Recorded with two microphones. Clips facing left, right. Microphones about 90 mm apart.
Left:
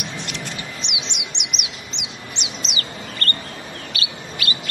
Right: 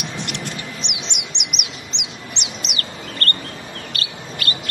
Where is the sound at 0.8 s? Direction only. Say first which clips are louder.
Even; 60° right (ahead or behind).